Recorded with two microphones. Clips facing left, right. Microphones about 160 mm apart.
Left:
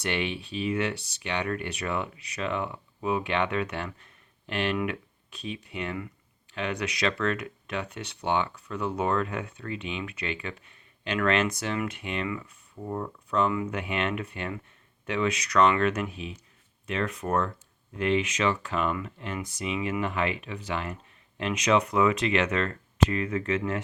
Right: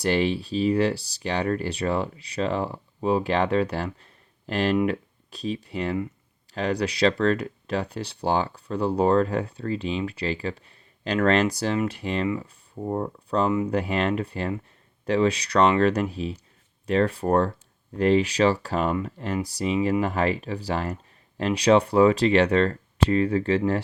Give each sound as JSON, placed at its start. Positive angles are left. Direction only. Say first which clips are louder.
{"t": 0.0, "sound": "speech", "louder": "right 7 dB", "side_deg": -35}